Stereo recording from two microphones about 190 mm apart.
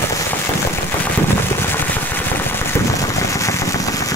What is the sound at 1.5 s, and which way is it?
Vehicle, 10° left (ahead or behind).